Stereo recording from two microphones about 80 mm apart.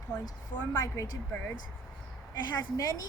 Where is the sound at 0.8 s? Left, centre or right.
Left.